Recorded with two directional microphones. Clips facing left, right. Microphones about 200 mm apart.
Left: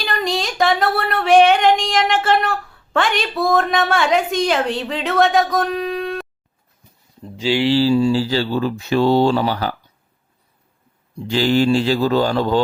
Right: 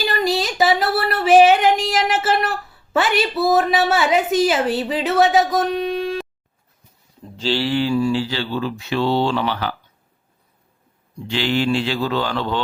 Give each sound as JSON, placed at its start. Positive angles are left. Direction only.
{"t": 0.0, "sound": "a sound", "side_deg": 0}
{"t": 7.3, "sound": "speech", "side_deg": 10}
{"t": 7.7, "sound": "speech", "side_deg": 30}
{"t": 11.3, "sound": "speech", "side_deg": 40}